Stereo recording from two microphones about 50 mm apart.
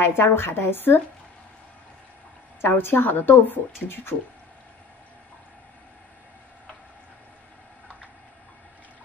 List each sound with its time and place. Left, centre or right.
0.0 s a woman's voice: left
2.8 s speech: left